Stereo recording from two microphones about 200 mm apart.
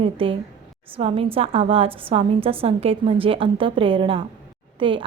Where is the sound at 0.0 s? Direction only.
25° right (ahead or behind).